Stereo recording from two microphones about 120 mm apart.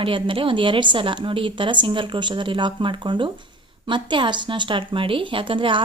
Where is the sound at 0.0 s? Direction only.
45° right (ahead or behind).